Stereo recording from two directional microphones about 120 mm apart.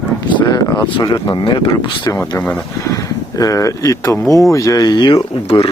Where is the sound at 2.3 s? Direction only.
15° left (ahead or behind).